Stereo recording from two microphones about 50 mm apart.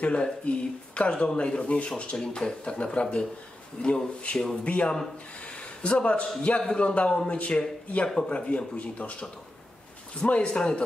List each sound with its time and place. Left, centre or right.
0.0 s speech: left
10.2 s speech: left